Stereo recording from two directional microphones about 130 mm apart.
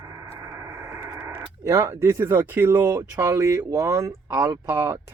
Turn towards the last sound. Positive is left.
turn(degrees=-20)  # may be behind; listen again after turning